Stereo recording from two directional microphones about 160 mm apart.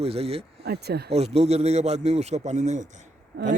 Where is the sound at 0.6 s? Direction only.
90° right.